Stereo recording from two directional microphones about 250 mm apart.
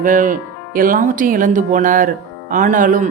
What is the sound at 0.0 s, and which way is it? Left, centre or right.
Speech, right.